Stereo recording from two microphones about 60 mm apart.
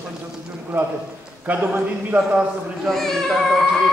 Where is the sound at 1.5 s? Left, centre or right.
Right.